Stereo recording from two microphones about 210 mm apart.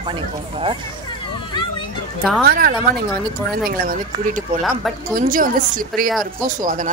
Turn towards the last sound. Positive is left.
turn(degrees=-40)  # may be behind; listen again after turning